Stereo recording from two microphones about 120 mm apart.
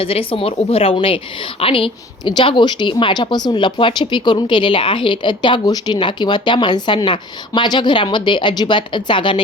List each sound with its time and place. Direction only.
0.0 s a woman's voice: 50° left (ahead or behind)